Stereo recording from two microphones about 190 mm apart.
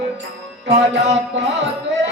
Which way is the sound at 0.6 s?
70° right (ahead or behind).